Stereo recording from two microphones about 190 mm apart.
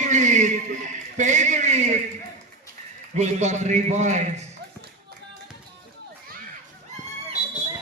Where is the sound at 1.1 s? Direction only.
40° right (ahead or behind).